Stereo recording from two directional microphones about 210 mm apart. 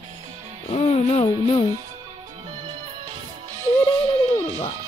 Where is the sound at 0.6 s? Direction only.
30° left (ahead or behind).